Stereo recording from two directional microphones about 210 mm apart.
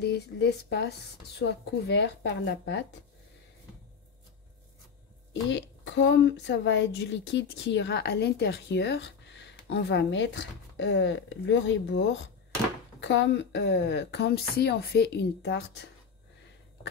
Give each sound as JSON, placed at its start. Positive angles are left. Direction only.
{"t": 0.0, "sound": "a woman's voice", "side_deg": 55}
{"t": 5.3, "sound": "a woman's voice", "side_deg": 60}